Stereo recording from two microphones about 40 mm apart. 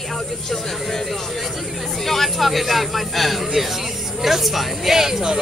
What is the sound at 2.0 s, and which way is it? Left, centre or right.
Speech, centre.